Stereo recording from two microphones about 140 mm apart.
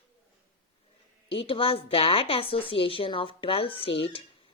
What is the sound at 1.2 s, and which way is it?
A woman's voice, 40° left (ahead or behind).